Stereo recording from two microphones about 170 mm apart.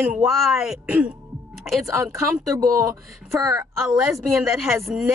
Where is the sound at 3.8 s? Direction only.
Centre (ahead or behind).